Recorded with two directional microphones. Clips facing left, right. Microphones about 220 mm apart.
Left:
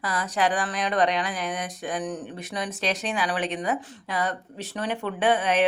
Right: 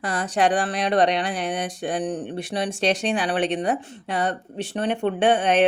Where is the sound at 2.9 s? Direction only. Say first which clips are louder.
Right 6 dB; 75° right (ahead or behind).